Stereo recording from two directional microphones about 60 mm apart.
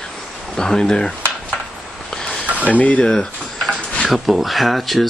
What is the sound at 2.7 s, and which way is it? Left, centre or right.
Speech, left.